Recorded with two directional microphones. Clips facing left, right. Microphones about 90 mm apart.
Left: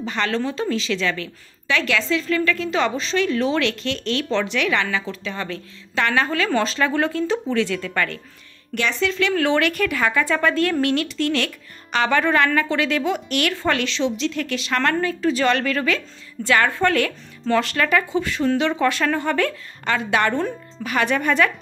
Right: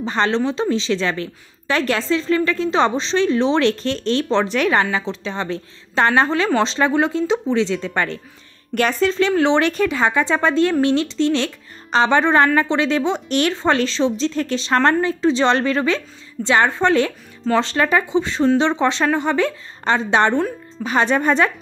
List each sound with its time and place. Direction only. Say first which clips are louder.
0.0 s a woman's voice: right 4 dB; 30° right (ahead or behind)
8.7 s a woman's voice: right 5 dB; 45° right (ahead or behind)
9.3 s a woman's voice: right 3 dB; 25° right (ahead or behind)